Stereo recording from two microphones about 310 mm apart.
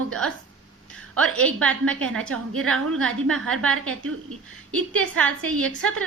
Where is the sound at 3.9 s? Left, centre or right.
Right.